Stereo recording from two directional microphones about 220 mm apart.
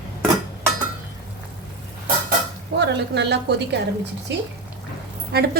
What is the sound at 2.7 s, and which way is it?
A woman's voice, 50° right (ahead or behind).